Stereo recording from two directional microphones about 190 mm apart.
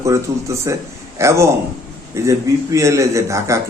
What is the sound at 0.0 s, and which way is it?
A man's voice, 15° right (ahead or behind).